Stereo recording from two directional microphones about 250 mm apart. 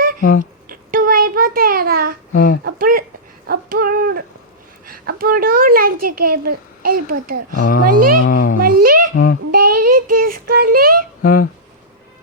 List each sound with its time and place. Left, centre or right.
0.2 s speech: left
0.7 s a sound: right
2.3 s speech: left
2.6 s a woman's voice: right
3.4 s a sound: right
6.8 s a woman's voice: right
7.6 s speech: left
8.8 s babbling: right
9.1 s speech: left
9.5 s child singing: right
11.2 s speech: left